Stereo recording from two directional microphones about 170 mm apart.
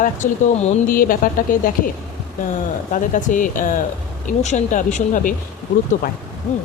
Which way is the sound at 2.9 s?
50° left (ahead or behind).